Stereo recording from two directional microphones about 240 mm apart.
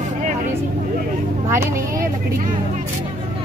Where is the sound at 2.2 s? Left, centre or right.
Right.